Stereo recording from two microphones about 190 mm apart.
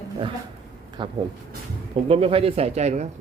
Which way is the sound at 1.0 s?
25° right (ahead or behind).